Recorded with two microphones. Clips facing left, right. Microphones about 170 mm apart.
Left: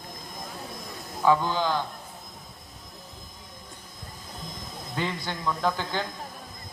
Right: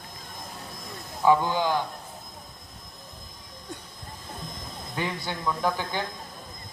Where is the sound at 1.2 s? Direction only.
15° right (ahead or behind).